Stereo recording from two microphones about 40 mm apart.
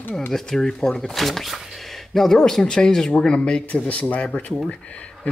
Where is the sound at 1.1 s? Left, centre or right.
Centre; by 3.6 s left.